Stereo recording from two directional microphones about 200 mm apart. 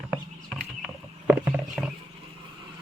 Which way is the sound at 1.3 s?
5° right (ahead or behind).